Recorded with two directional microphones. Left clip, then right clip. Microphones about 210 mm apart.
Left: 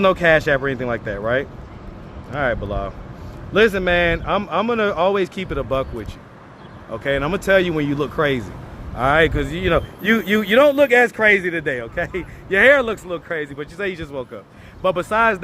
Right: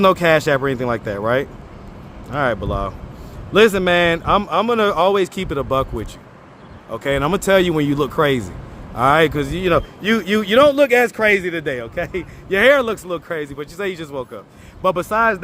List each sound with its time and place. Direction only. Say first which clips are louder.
0.0 s a man's voice: right 1 dB; 30° right (ahead or behind)